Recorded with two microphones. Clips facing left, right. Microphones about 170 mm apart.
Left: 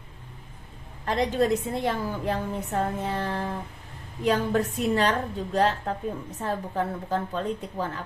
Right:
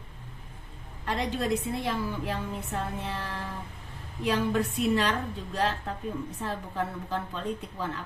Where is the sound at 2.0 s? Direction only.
40° left (ahead or behind).